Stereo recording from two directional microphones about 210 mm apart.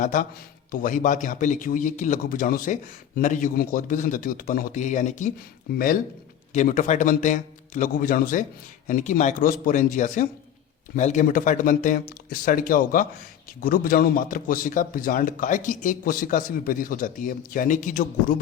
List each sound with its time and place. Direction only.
0.0 s speech: 40° left (ahead or behind)